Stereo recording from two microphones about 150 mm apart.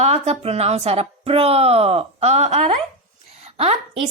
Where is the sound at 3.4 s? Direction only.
45° right (ahead or behind).